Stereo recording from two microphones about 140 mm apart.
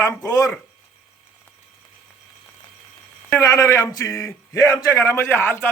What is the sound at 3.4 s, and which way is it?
A man's voice, 20° left (ahead or behind).